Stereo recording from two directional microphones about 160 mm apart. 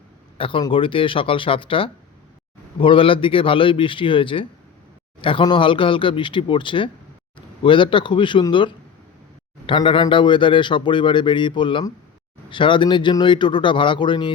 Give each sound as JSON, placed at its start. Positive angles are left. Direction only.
{"t": 0.3, "sound": "a man's voice", "side_deg": 35}